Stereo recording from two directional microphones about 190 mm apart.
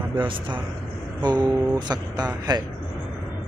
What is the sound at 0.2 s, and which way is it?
Speech, 25° right (ahead or behind).